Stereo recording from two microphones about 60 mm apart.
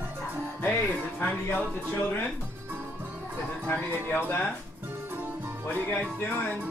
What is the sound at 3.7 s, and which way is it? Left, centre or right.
Speech, left.